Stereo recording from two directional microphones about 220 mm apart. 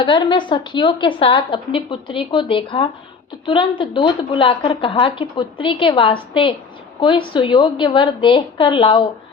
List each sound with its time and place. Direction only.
0.0 s a woman's voice: 20° left (ahead or behind)